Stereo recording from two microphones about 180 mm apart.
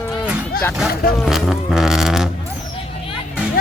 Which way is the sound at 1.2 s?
Centre (ahead or behind).